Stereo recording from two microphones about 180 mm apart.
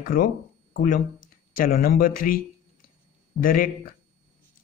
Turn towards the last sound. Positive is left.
turn(degrees=50)  # may be behind; listen again after turning